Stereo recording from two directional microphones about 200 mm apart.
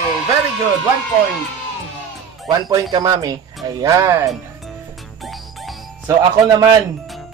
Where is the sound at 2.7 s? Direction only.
15° right (ahead or behind).